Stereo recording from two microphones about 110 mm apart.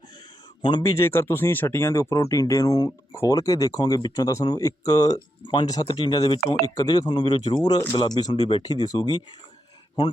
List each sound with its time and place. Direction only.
0.8 s speech: 30° left (ahead or behind)
5.4 s speech: 45° left (ahead or behind)